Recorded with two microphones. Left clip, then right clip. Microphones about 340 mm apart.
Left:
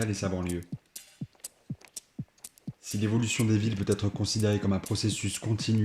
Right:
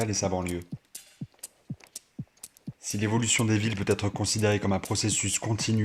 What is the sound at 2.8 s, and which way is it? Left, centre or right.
Speech, right.